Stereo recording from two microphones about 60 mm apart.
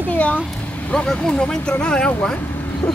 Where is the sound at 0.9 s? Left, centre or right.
Centre.